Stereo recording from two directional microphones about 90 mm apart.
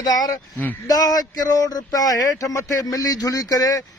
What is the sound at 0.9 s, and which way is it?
A man's voice, 45° left (ahead or behind).